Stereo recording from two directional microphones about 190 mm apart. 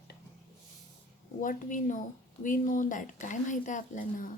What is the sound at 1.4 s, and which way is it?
Speech, 45° left (ahead or behind).